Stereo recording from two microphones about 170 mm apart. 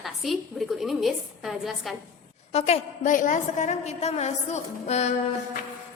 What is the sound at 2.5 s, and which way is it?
A woman's voice, 40° left (ahead or behind).